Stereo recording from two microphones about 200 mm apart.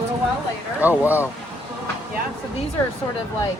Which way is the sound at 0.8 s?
10° right (ahead or behind).